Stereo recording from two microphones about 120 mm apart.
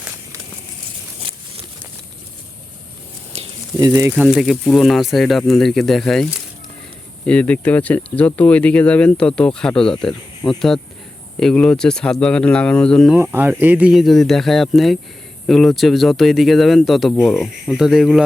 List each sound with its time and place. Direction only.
3.3 s a sound: 60° right (ahead or behind)
3.8 s speech: 30° right (ahead or behind)
4.2 s speech: 5° right (ahead or behind)
7.3 s speech: 10° left (ahead or behind)
13.3 s speech: 15° right (ahead or behind)
13.9 s speech: centre (ahead or behind)